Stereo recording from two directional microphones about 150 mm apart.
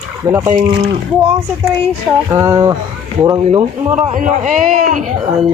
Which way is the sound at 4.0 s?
55° right (ahead or behind).